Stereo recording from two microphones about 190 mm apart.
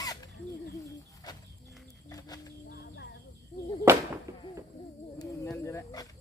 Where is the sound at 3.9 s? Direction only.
15° right (ahead or behind).